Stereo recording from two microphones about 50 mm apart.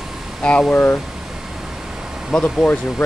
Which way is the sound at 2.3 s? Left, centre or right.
Centre.